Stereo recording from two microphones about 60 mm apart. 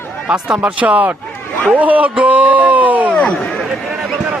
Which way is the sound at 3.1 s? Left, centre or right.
Centre.